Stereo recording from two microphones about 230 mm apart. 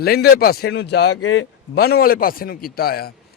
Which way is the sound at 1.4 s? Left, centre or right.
Left.